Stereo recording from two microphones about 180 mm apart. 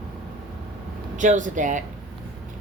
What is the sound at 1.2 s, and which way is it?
Speech, 45° right (ahead or behind).